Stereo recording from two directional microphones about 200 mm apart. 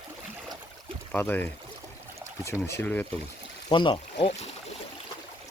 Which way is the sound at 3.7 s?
25° left (ahead or behind).